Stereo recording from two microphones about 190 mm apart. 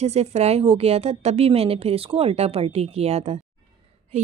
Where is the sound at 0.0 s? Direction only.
35° right (ahead or behind).